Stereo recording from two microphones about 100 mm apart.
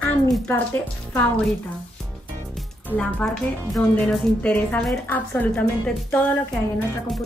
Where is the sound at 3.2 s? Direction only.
15° left (ahead or behind).